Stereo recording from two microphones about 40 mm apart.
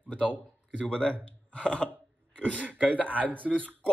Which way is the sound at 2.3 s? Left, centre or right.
Left.